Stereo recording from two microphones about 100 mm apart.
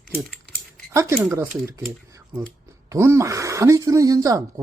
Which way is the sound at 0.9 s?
30° right (ahead or behind).